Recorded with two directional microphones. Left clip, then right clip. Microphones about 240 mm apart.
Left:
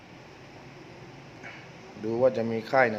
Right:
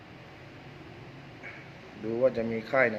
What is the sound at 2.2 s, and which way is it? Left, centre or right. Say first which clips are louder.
Speech: left 2 dB; centre.